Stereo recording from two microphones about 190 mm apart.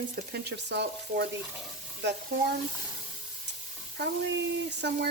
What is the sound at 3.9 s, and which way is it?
Speech, 65° right (ahead or behind).